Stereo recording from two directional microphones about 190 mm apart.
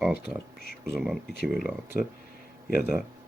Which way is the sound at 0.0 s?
5° right (ahead or behind).